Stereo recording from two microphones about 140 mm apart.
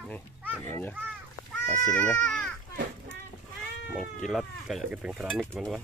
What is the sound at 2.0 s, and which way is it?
Speech, 10° left (ahead or behind).